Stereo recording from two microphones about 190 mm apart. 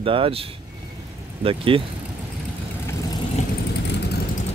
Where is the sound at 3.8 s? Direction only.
65° left (ahead or behind).